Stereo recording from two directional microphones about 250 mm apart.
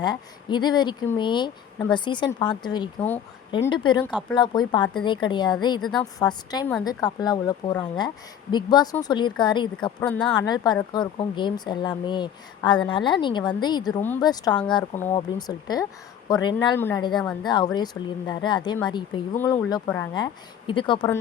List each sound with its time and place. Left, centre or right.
0.0 s speech: centre
10.0 s speech: centre
10.3 s speech: centre